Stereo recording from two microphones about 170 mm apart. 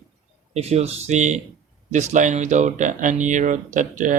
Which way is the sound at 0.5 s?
40° right (ahead or behind).